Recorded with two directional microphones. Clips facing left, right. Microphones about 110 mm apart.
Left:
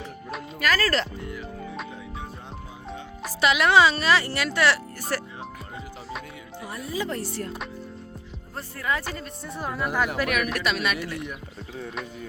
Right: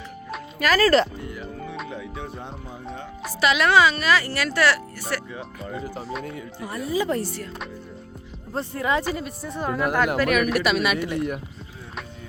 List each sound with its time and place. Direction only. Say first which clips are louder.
0.3 s music: right 2 dB; centre (ahead or behind)
0.7 s speech: right 7 dB; 15° right (ahead or behind)
3.4 s a woman's voice: right 1 dB; 20° left (ahead or behind)
5.1 s speech: even; 35° left (ahead or behind)
6.7 s speech: right 6 dB; centre (ahead or behind)
8.5 s speech: right 5 dB; 25° right (ahead or behind)
9.0 s speech: right 6 dB; 5° right (ahead or behind)